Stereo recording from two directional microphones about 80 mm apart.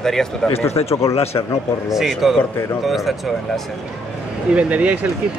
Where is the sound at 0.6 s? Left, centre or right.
Left.